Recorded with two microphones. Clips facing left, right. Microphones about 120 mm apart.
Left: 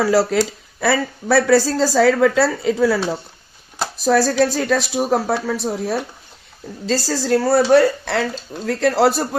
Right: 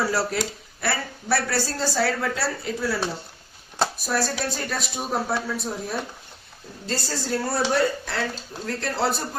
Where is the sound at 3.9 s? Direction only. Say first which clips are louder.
Left 11 dB; 90° left.